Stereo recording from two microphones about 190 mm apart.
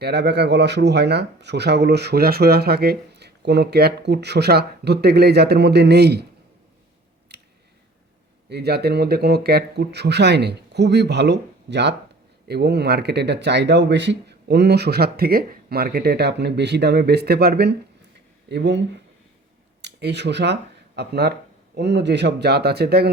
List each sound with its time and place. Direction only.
0.0 s speech: 60° right (ahead or behind)
7.3 s a sound: 60° right (ahead or behind)
8.4 s speech: 60° right (ahead or behind)
19.8 s speech: 65° right (ahead or behind)